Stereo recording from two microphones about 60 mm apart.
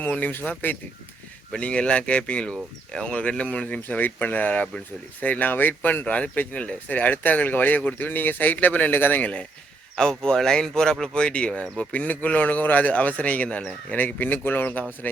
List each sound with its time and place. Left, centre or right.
0.0 s speech: left
1.5 s a man's voice: centre; by 9.2 s left
9.9 s speech: centre; by 14.8 s left